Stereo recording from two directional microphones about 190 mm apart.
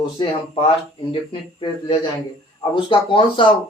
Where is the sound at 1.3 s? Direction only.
25° left (ahead or behind).